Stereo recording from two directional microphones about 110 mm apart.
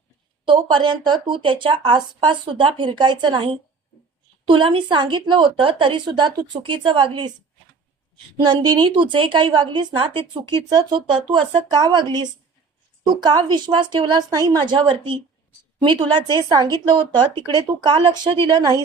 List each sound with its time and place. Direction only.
0.4 s speech: 50° right (ahead or behind)
8.4 s speech: 40° right (ahead or behind)
13.2 s speech: 40° right (ahead or behind)
18.4 s speech: 35° right (ahead or behind)